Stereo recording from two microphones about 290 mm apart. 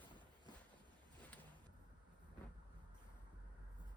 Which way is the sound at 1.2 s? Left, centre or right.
Centre.